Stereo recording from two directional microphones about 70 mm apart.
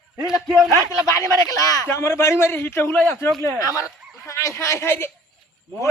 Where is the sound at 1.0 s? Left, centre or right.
Left.